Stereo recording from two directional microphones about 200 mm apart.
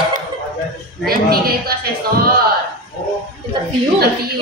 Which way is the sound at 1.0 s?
50° right (ahead or behind).